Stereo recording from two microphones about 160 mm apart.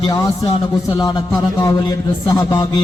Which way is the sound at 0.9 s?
20° left (ahead or behind).